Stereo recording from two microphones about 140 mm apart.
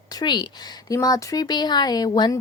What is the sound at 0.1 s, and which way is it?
A woman's voice, 30° left (ahead or behind).